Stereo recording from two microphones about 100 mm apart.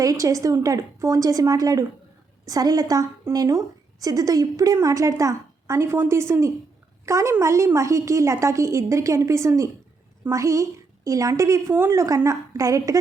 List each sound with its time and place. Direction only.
0.0 s a woman's voice: 35° right (ahead or behind)